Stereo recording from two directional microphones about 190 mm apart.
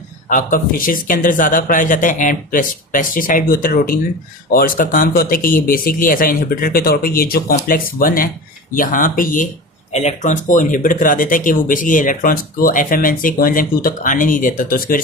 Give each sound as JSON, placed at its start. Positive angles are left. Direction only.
{"t": 0.3, "sound": "speech", "side_deg": 45}